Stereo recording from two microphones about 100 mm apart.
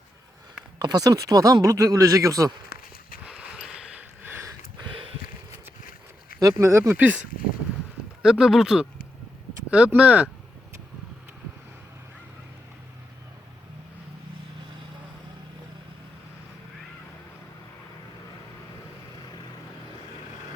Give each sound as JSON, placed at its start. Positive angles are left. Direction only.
{"t": 0.8, "sound": "speech", "side_deg": -40}
{"t": 3.2, "sound": "a sound", "side_deg": -10}
{"t": 6.6, "sound": "speech", "side_deg": -30}
{"t": 6.9, "sound": "speech", "side_deg": -15}
{"t": 8.2, "sound": "speech", "side_deg": -5}